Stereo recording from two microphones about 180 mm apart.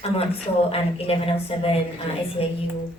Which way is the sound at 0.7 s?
30° left (ahead or behind).